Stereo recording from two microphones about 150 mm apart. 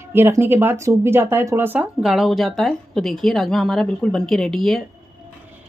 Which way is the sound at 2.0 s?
Centre (ahead or behind).